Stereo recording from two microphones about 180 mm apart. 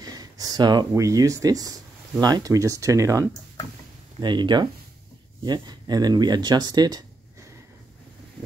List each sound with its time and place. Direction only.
0.0 s speech: 20° right (ahead or behind)